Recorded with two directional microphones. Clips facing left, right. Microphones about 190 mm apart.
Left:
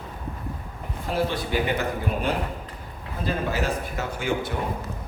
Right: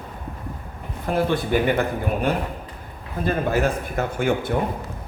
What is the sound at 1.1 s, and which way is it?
Speech, 50° right (ahead or behind).